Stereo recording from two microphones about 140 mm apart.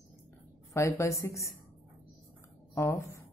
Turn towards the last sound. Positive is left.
turn(degrees=20)  # may be behind; listen again after turning